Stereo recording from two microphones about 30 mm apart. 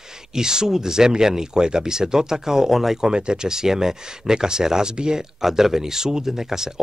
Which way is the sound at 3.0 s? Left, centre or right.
Right.